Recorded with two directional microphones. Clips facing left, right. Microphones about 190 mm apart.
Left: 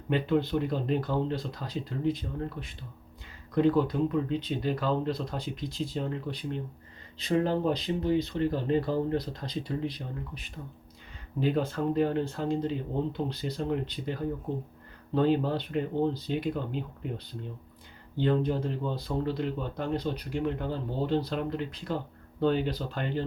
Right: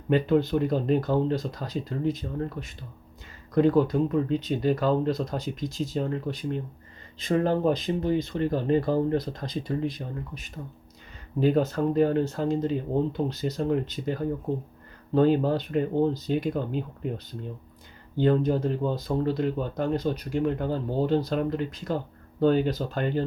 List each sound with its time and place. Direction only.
0.1 s speech: 45° right (ahead or behind)
18.2 s speech: 45° right (ahead or behind)